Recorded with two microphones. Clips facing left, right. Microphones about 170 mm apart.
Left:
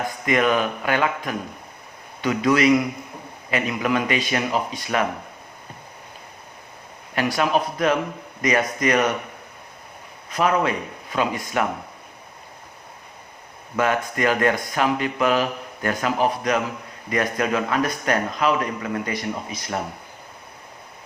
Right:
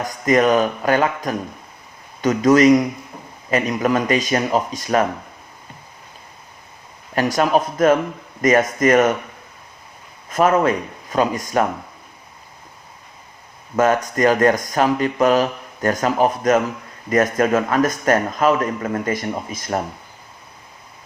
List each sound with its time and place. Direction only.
0.0 s speech: 40° right (ahead or behind)
7.2 s speech: 45° right (ahead or behind)
10.2 s speech: 45° right (ahead or behind)
13.7 s speech: 45° right (ahead or behind)